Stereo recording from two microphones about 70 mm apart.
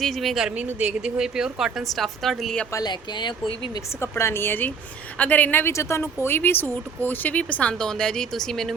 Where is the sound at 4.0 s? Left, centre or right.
Left.